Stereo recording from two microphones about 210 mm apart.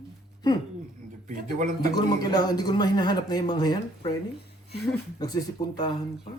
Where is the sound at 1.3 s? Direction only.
40° right (ahead or behind).